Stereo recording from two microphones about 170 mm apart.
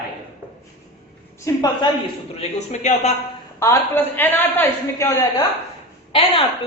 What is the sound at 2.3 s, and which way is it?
Speech, 40° left (ahead or behind).